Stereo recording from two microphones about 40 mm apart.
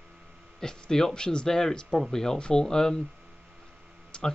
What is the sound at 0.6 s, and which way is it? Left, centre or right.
A man's voice, centre.